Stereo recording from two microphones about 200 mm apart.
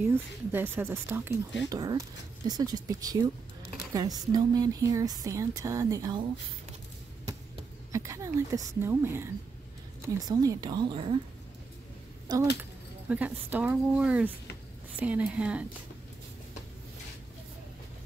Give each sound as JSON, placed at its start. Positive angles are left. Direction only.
{"t": 0.0, "sound": "speech", "side_deg": -10}
{"t": 7.9, "sound": "speech", "side_deg": -15}
{"t": 12.3, "sound": "speech", "side_deg": -20}
{"t": 13.1, "sound": "speech", "side_deg": -10}